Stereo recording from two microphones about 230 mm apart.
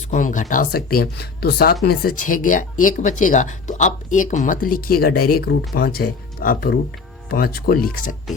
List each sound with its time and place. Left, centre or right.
0.1 s speech: left